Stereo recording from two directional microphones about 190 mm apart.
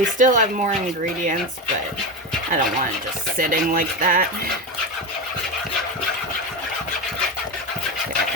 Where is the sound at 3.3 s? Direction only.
50° right (ahead or behind).